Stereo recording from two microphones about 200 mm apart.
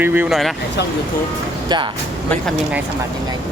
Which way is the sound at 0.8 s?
55° left (ahead or behind).